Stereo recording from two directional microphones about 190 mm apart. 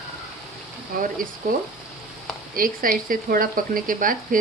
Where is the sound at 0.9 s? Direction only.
50° right (ahead or behind).